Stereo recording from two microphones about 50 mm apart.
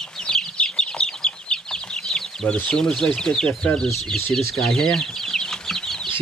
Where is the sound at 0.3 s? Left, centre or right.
Centre.